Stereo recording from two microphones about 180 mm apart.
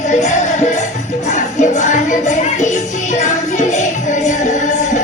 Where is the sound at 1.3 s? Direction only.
40° left (ahead or behind).